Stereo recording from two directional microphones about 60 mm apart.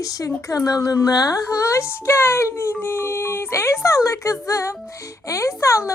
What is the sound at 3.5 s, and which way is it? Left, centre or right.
Speech, left.